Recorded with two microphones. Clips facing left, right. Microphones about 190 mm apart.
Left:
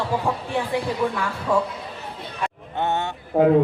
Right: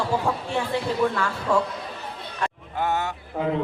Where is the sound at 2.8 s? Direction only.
25° left (ahead or behind).